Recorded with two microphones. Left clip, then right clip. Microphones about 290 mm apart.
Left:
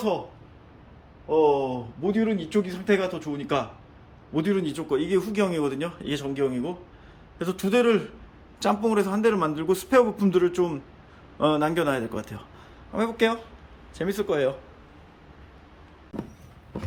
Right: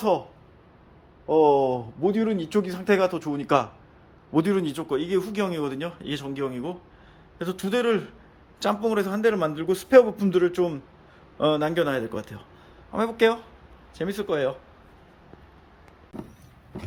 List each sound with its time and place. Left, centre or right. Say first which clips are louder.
1.3 s speech: right 2 dB; right
2.0 s speech: left 1 dB; centre